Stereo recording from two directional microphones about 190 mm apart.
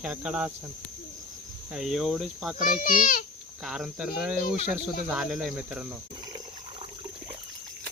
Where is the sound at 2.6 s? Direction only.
45° left (ahead or behind).